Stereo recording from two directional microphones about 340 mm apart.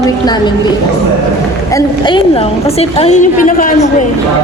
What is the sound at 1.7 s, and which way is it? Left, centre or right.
A woman's voice, centre.